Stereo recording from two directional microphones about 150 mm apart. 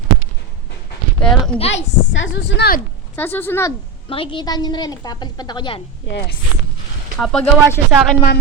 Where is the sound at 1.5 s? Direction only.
40° left (ahead or behind).